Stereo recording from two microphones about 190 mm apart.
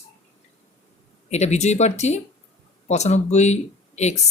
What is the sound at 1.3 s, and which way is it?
Speech, 35° left (ahead or behind).